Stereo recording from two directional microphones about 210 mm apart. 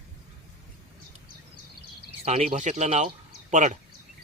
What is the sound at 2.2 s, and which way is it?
Speech, 30° right (ahead or behind).